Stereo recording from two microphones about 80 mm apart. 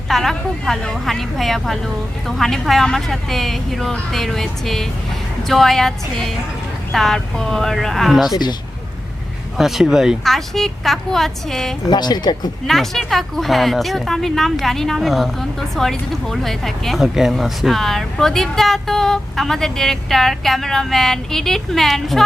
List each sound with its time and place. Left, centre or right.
0.1 s a woman's voice: centre
8.3 s speech: left
9.6 s a woman's voice: centre
11.9 s speech: left
12.6 s a woman's voice: centre